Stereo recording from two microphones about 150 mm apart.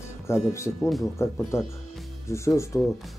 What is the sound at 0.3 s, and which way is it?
Speech, 20° left (ahead or behind).